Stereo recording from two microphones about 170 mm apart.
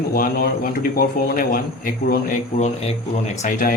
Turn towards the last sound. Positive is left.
turn(degrees=50)  # may be behind; listen again after turning